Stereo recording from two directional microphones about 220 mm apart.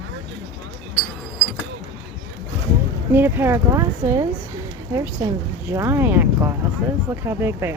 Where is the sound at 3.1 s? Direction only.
10° right (ahead or behind).